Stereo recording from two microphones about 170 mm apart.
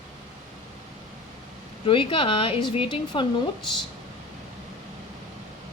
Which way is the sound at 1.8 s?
30° left (ahead or behind).